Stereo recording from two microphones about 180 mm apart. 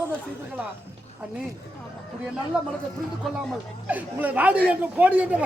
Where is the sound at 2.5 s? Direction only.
5° right (ahead or behind).